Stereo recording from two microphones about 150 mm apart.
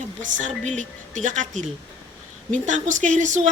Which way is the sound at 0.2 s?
55° right (ahead or behind).